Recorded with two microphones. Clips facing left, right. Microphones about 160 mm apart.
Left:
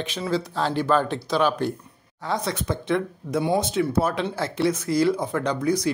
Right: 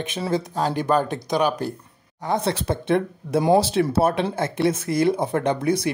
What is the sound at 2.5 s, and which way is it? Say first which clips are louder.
Speech: right 3 dB; 65° right (ahead or behind).